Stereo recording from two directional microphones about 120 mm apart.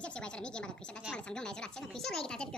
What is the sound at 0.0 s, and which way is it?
A woman's voice, 10° left (ahead or behind).